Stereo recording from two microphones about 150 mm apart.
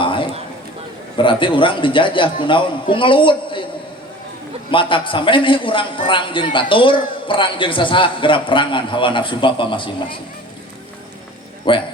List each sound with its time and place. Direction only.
0.0 s a sound: 35° left (ahead or behind)
1.1 s a man's voice: 35° left (ahead or behind)
4.7 s a man's voice: 35° left (ahead or behind)
11.7 s a man's voice: 35° left (ahead or behind)